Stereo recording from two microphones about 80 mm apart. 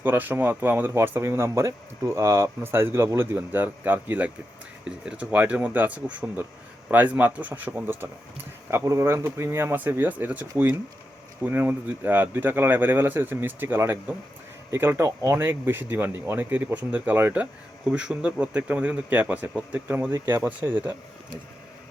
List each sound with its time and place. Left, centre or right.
0.0 s speech: right
11.4 s speech: right
15.4 s speech: right
20.1 s speech: right
20.4 s speech: right